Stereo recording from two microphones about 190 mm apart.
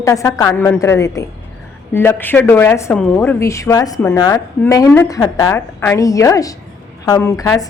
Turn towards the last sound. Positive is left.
turn(degrees=15)  # may be behind; listen again after turning